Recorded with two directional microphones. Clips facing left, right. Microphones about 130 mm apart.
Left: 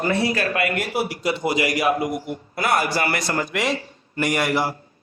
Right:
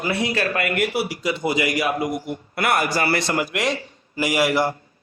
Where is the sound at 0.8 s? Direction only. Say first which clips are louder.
Right 2 dB; 75° right (ahead or behind).